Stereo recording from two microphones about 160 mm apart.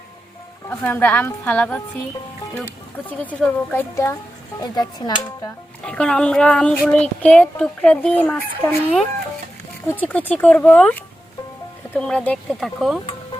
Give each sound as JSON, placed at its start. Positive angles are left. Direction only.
{"t": 0.7, "sound": "speech", "side_deg": 15}
{"t": 3.1, "sound": "speech", "side_deg": 10}
{"t": 5.8, "sound": "speech", "side_deg": 5}
{"t": 9.9, "sound": "speech", "side_deg": 10}
{"t": 11.9, "sound": "speech", "side_deg": 5}